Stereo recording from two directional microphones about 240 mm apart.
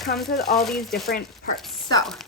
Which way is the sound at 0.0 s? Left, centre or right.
Centre.